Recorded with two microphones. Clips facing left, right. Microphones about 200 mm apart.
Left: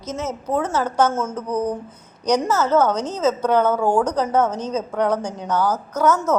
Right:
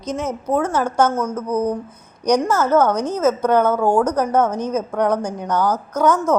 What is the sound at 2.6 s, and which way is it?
A woman's voice, 10° right (ahead or behind).